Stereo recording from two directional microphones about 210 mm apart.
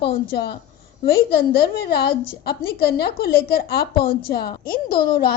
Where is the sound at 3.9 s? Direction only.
25° left (ahead or behind).